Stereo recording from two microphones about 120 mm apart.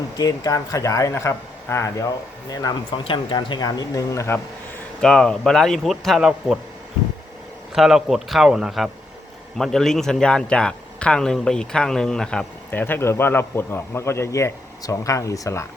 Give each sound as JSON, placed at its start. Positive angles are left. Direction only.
{"t": 0.2, "sound": "a man's voice", "side_deg": 30}
{"t": 3.0, "sound": "speech", "side_deg": 45}
{"t": 4.9, "sound": "a man's voice", "side_deg": 5}
{"t": 7.8, "sound": "a man's voice", "side_deg": -5}
{"t": 12.8, "sound": "a man's voice", "side_deg": 20}